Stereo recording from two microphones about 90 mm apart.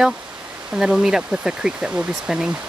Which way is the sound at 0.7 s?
5° right (ahead or behind).